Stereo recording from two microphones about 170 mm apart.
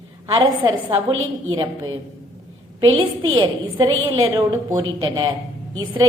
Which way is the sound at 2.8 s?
30° right (ahead or behind).